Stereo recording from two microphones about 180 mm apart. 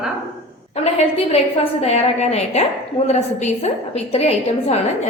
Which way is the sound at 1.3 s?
35° left (ahead or behind).